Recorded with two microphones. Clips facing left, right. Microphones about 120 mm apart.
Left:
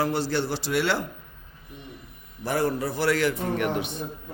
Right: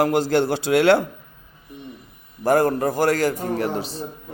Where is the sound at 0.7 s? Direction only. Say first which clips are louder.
Right 7 dB; 75° right (ahead or behind).